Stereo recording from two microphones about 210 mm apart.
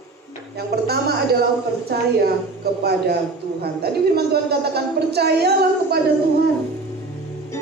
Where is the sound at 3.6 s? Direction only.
50° right (ahead or behind).